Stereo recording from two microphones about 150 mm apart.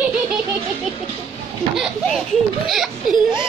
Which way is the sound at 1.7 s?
Centre (ahead or behind).